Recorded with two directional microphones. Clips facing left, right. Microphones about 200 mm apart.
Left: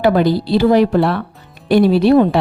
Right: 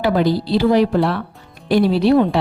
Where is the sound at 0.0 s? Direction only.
55° left (ahead or behind).